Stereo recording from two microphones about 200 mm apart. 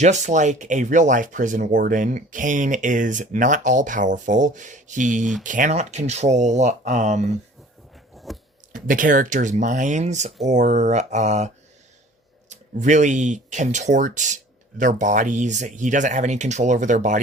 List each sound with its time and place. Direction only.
0.0 s speech: 35° right (ahead or behind)
8.1 s a sound: centre (ahead or behind)
8.7 s speech: 40° right (ahead or behind)